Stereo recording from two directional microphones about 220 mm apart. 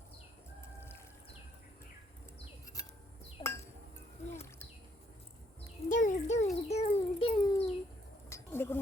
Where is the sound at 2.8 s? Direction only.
15° left (ahead or behind).